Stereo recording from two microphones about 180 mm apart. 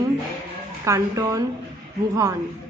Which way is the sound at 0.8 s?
20° right (ahead or behind).